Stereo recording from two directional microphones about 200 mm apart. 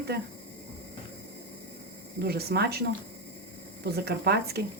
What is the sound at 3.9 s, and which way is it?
Speech, 55° right (ahead or behind).